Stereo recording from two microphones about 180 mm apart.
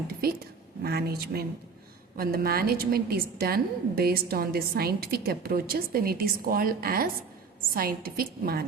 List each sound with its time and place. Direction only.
0.8 s a woman's voice: 60° right (ahead or behind)